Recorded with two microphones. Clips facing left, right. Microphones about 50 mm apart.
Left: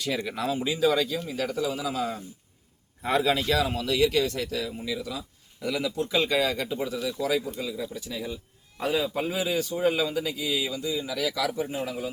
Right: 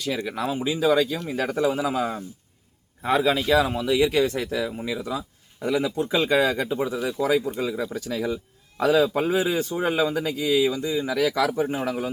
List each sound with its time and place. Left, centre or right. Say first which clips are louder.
0.4 s speech: right 2 dB; centre
1.3 s speech: right 5 dB; right
3.0 s speech: right 3 dB; centre; by 7.9 s right
7.9 s a man's voice: right 7 dB; right
9.4 s speech: right 2 dB; right
11.9 s a man's voice: right 5 dB; right